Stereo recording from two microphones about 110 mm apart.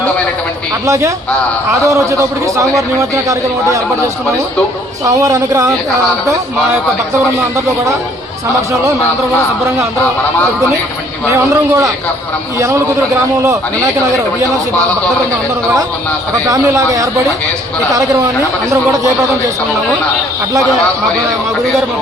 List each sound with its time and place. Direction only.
0.9 s a man's voice: 25° right (ahead or behind)
5.0 s speech: 30° right (ahead or behind)
11.3 s a man's voice: 25° right (ahead or behind)
16.5 s speech: 30° right (ahead or behind)